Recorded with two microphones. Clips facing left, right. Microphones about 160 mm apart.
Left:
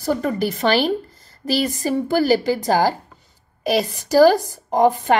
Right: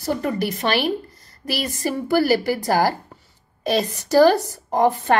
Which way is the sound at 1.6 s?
20° left (ahead or behind).